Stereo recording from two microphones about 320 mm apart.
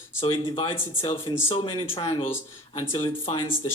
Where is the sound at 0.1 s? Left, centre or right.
Centre.